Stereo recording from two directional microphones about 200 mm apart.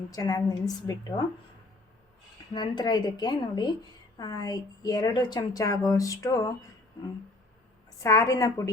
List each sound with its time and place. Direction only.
0.1 s a woman's voice: 20° left (ahead or behind)
2.5 s a woman's voice: 20° left (ahead or behind)
8.0 s a woman's voice: 15° left (ahead or behind)